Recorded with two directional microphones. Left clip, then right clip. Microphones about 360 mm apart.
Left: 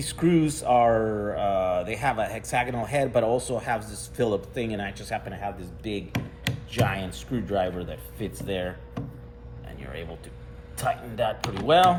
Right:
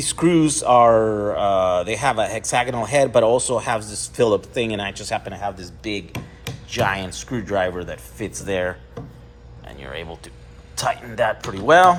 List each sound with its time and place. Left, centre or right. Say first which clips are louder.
0.0 s a man's voice: right 6 dB; centre
1.0 s mantra: right 7 dB; right
1.3 s a man's voice: right 6 dB; right
6.7 s speech: right 7 dB; centre
9.6 s a sound: right 7 dB; centre
11.2 s speech: right 6 dB; right